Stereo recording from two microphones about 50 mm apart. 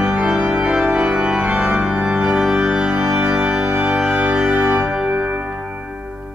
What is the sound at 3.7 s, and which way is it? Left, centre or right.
Organ, right.